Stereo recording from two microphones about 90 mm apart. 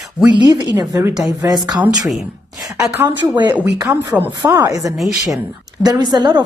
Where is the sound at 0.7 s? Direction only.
40° right (ahead or behind).